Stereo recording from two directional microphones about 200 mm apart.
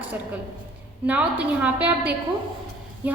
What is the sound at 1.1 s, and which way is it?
A woman's voice, 5° right (ahead or behind).